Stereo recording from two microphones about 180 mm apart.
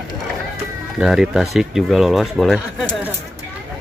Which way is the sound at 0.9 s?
5° right (ahead or behind).